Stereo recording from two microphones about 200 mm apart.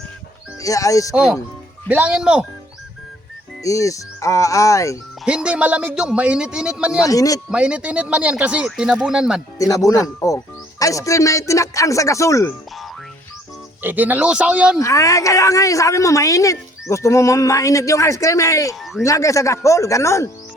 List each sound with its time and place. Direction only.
0.6 s speech: 15° left (ahead or behind)
1.1 s speech: 5° right (ahead or behind)
3.6 s speech: 15° left (ahead or behind)
5.2 s speech: 5° right (ahead or behind)
7.0 s speech: 15° left (ahead or behind)
7.5 s speech: 5° right (ahead or behind)
9.6 s speech: 15° left (ahead or behind)
13.8 s speech: 10° right (ahead or behind)
14.8 s speech: 15° left (ahead or behind)